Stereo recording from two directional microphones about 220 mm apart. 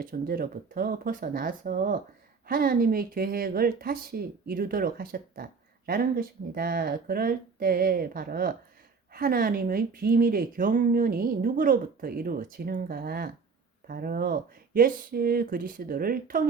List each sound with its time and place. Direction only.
0.0 s speech: 40° right (ahead or behind)